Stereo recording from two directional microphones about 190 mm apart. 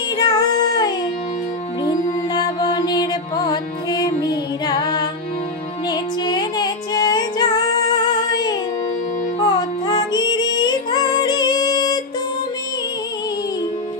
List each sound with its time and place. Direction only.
0.2 s child singing: 20° left (ahead or behind)
1.9 s music: 20° left (ahead or behind)